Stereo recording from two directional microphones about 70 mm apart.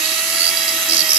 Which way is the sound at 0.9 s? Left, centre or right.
Centre.